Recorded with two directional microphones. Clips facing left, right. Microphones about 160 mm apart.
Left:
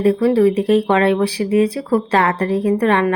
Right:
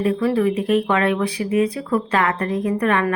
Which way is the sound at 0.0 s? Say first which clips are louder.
Left 5 dB; 35° left (ahead or behind).